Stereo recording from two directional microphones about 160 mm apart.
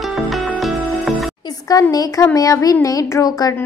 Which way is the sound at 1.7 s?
25° left (ahead or behind).